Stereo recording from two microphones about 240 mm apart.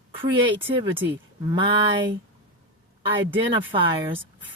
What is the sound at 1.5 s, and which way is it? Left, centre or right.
Speech, right.